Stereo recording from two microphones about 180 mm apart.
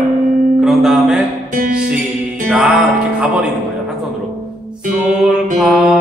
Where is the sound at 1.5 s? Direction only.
50° right (ahead or behind).